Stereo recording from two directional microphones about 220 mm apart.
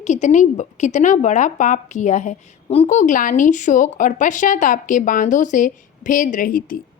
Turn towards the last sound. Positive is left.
turn(degrees=40)  # may be behind; listen again after turning